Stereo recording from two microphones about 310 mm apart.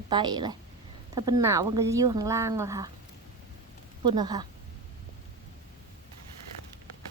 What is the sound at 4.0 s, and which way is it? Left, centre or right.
Speech, centre.